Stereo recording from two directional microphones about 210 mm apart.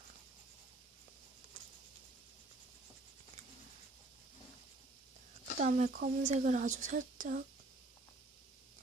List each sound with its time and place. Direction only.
5.5 s a woman's voice: 35° right (ahead or behind)